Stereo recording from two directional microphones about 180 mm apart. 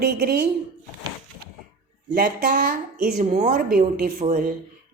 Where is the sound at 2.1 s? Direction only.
50° right (ahead or behind).